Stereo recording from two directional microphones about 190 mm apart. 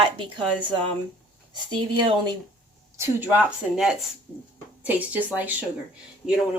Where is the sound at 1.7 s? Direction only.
25° right (ahead or behind).